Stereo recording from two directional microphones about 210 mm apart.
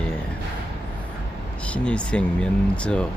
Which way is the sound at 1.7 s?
5° left (ahead or behind).